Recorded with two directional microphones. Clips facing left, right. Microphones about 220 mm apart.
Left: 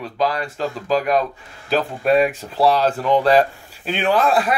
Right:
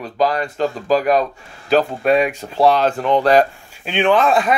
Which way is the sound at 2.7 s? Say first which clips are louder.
Right 1 dB; 35° left (ahead or behind).